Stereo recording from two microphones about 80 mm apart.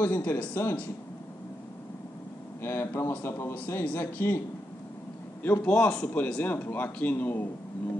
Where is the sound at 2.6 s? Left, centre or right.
Left.